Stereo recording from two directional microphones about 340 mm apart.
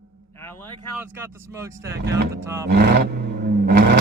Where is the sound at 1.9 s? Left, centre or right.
Right.